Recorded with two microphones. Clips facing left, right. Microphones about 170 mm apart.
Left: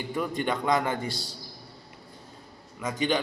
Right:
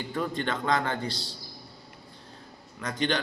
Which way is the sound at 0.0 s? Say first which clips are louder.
Left 1 dB; 15° left (ahead or behind).